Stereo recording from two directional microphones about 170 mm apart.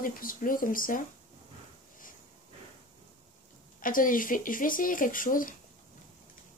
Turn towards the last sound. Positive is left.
turn(degrees=55)  # may be behind; listen again after turning